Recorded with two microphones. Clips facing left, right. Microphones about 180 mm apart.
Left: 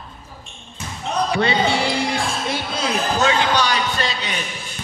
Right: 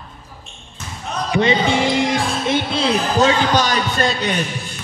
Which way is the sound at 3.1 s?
40° right (ahead or behind).